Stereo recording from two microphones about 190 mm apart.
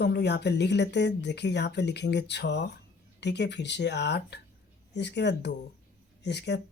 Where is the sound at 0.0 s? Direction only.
60° left (ahead or behind).